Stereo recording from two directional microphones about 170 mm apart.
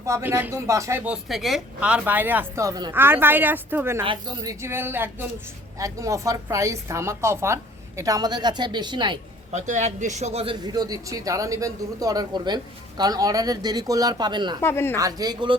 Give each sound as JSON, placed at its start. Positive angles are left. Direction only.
{"t": 0.0, "sound": "speech", "side_deg": -15}
{"t": 4.0, "sound": "a woman's voice", "side_deg": -30}
{"t": 4.6, "sound": "a woman's voice", "side_deg": -15}
{"t": 9.5, "sound": "a woman's voice", "side_deg": -45}
{"t": 14.6, "sound": "speech", "side_deg": 15}
{"t": 14.9, "sound": "a woman's voice", "side_deg": -20}